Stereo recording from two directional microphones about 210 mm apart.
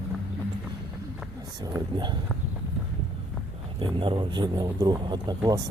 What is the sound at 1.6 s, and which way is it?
Speech, 20° right (ahead or behind).